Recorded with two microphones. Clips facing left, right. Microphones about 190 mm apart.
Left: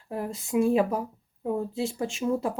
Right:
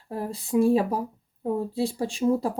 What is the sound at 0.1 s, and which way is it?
Speech, 35° right (ahead or behind).